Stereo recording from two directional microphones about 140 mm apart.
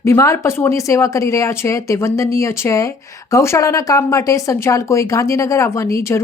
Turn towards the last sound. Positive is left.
turn(degrees=20)  # may be behind; listen again after turning